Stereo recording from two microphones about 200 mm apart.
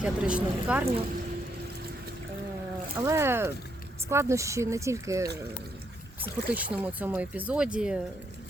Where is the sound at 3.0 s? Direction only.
15° right (ahead or behind).